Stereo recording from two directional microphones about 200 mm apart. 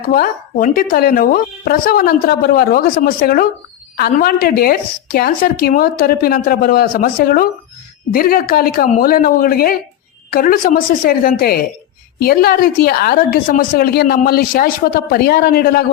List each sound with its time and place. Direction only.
0.1 s a woman's voice: 45° left (ahead or behind)